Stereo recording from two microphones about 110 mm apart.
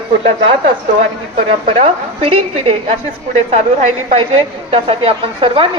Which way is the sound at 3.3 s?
80° right.